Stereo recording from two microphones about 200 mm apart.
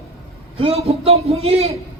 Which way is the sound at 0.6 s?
30° right (ahead or behind).